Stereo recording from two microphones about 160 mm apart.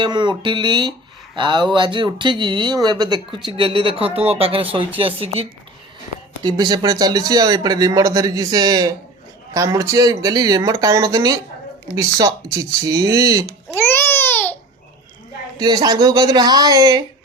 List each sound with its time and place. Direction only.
0.0 s a woman's voice: 30° right (ahead or behind)
6.4 s speech: 25° right (ahead or behind)
13.7 s babbling: 15° left (ahead or behind)
15.5 s speech: 25° right (ahead or behind)